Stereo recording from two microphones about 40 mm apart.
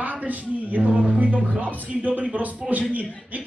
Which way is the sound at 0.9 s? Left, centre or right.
Right.